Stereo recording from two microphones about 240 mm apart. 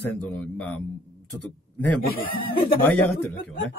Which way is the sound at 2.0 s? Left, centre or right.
Left.